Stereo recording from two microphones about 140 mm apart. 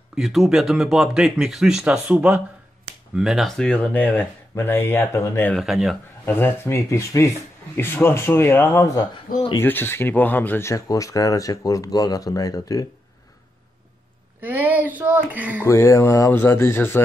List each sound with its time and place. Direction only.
0.1 s speech: centre (ahead or behind); by 5.5 s 20° left (ahead or behind)
5.5 s speech: centre (ahead or behind)
6.2 s speech: 15° left (ahead or behind)
14.4 s speech: 15° right (ahead or behind)
15.6 s speech: 20° left (ahead or behind)